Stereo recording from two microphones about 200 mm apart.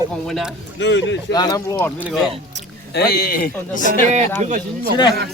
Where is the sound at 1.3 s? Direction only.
20° left (ahead or behind).